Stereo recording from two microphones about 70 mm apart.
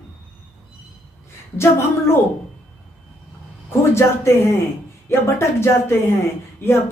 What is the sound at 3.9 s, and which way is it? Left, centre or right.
Speech, left.